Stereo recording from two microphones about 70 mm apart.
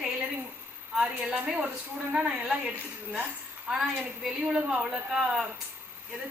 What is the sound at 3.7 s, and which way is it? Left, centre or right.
A woman's voice, centre.